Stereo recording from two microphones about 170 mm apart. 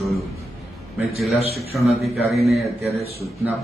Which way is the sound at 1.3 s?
35° left (ahead or behind).